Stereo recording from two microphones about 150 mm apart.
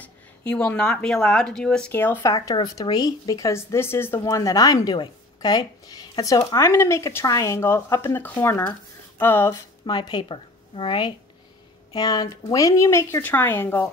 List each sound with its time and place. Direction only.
0.0 s speech: 10° left (ahead or behind)
2.3 s a woman's voice: 25° left (ahead or behind)
9.8 s a woman's voice: 30° left (ahead or behind); by 13.8 s 15° left (ahead or behind)